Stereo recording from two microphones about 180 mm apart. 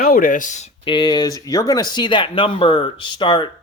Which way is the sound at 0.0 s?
55° left (ahead or behind).